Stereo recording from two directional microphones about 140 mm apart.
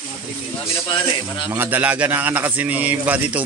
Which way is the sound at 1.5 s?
15° right (ahead or behind).